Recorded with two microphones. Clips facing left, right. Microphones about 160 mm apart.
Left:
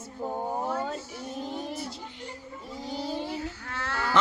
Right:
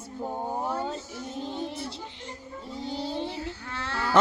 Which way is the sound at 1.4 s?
25° right (ahead or behind).